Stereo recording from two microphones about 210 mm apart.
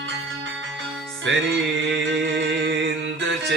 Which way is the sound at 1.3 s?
65° right (ahead or behind).